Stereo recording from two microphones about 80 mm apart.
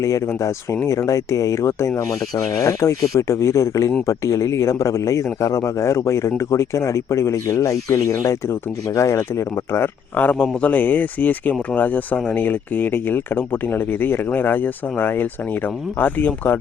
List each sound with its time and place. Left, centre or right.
0.0 s a man's voice: left